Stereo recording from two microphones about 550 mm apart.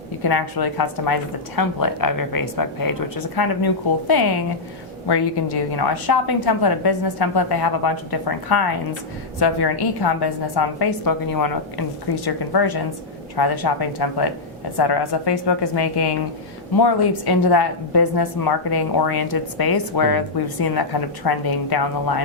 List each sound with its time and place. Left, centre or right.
0.2 s a woman's voice: left